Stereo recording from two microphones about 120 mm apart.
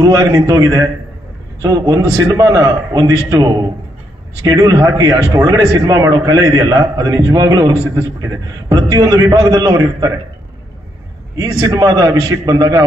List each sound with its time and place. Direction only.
0.0 s a man's voice: 30° right (ahead or behind)
11.3 s a man's voice: 30° right (ahead or behind)